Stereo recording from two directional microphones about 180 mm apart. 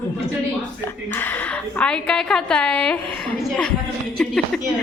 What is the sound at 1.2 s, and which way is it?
A woman's voice, 10° left (ahead or behind).